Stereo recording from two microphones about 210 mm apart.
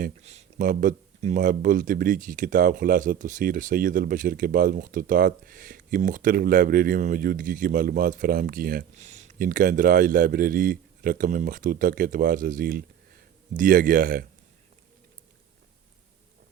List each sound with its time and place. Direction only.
0.0 s speech: 30° right (ahead or behind)